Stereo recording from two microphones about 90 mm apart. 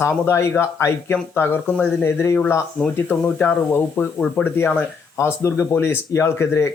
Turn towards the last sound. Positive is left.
turn(degrees=30)  # may be behind; listen again after turning